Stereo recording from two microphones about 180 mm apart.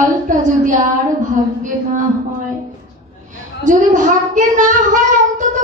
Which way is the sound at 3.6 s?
45° right (ahead or behind).